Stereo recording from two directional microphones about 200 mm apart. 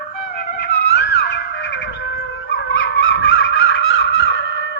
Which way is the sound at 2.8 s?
75° left (ahead or behind).